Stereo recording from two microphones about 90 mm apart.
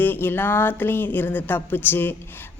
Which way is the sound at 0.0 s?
20° left (ahead or behind).